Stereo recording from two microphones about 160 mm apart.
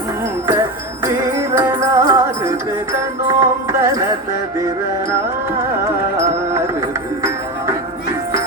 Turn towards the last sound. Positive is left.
turn(degrees=-15)  # may be behind; listen again after turning